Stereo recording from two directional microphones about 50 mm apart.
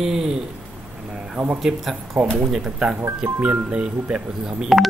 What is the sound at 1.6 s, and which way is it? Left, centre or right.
Speech, centre.